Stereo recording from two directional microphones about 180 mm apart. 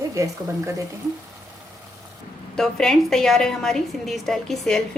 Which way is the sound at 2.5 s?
Centre (ahead or behind).